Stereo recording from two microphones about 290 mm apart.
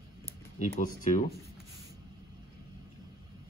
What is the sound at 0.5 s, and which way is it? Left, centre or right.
Speech, left.